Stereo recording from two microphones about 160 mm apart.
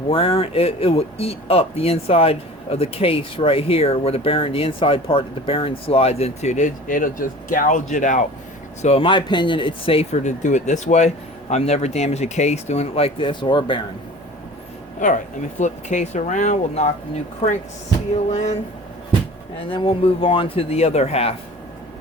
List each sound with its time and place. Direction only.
0.1 s speech: 35° left (ahead or behind); by 8.3 s 50° left (ahead or behind)
8.8 s speech: 40° left (ahead or behind)
15.0 s speech: 50° left (ahead or behind)
18.3 s speech: 40° left (ahead or behind)
19.7 s speech: 35° left (ahead or behind)